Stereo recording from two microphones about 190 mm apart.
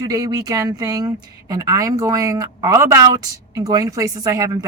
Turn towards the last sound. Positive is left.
turn(degrees=-20)  # may be behind; listen again after turning